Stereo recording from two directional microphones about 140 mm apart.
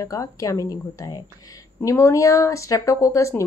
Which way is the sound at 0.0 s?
25° left (ahead or behind).